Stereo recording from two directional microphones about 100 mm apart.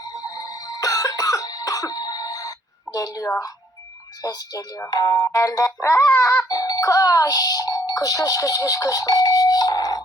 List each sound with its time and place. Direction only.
0.1 s music: 35° left (ahead or behind)